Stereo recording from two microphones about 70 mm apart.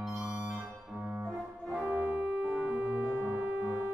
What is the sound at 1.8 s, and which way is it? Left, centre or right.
Organ, centre.